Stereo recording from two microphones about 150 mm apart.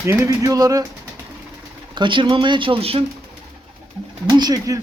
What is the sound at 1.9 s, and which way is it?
Speech, 30° right (ahead or behind).